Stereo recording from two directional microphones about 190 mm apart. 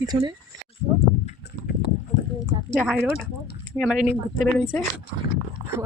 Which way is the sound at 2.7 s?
Centre (ahead or behind).